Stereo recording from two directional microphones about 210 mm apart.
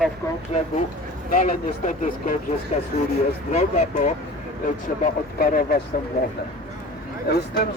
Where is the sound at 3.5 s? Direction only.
30° left (ahead or behind).